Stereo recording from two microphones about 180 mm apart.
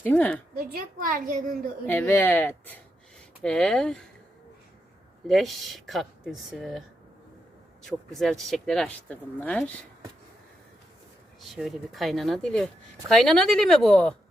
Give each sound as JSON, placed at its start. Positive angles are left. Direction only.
{"t": 0.0, "sound": "speech", "side_deg": 10}
{"t": 0.5, "sound": "a woman's voice", "side_deg": -55}
{"t": 1.9, "sound": "speech", "side_deg": 10}
{"t": 5.3, "sound": "speech", "side_deg": 0}
{"t": 7.9, "sound": "speech", "side_deg": 0}
{"t": 11.3, "sound": "speech", "side_deg": 0}